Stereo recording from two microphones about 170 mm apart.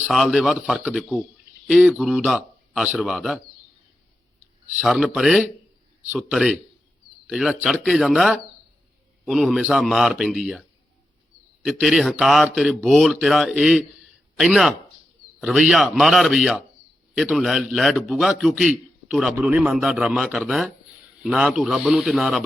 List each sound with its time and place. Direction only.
0.0 s a man's voice: centre (ahead or behind)
4.8 s a man's voice: centre (ahead or behind)